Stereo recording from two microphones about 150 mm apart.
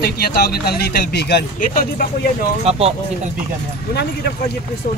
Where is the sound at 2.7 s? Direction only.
40° right (ahead or behind).